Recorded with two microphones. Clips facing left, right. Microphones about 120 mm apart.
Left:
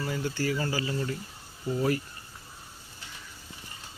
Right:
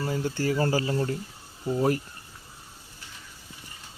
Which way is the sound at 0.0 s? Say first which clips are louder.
Right 3 dB; 35° right (ahead or behind).